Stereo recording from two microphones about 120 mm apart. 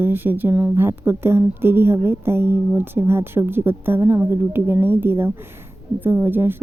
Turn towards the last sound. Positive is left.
turn(degrees=-20)  # may be behind; listen again after turning